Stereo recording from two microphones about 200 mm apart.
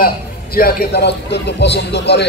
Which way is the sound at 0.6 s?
50° left (ahead or behind).